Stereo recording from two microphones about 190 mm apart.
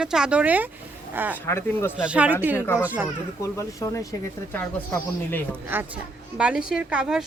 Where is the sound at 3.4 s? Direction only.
15° left (ahead or behind).